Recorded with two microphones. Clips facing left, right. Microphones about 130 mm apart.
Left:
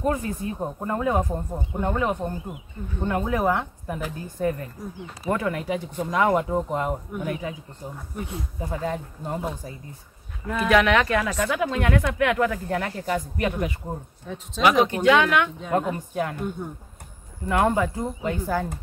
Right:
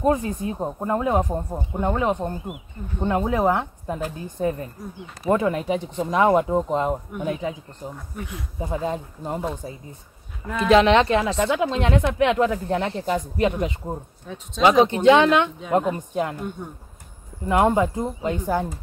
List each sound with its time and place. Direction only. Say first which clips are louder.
0.0 s speech: right 4 dB; 20° right (ahead or behind)
8.2 s speech: left 3 dB; 30° left (ahead or behind)
8.5 s speech: right 3 dB; 20° right (ahead or behind)
10.7 s speech: right 4 dB; 25° right (ahead or behind)
14.2 s speech: left 1 dB; centre (ahead or behind)
14.6 s speech: right 3 dB; 25° right (ahead or behind)
17.5 s speech: right 3 dB; 20° right (ahead or behind)